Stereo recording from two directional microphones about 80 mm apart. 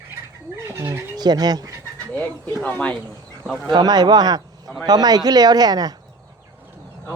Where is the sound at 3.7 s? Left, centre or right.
Right.